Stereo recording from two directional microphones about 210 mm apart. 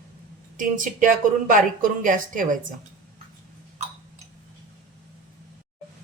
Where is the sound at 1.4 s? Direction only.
40° right (ahead or behind).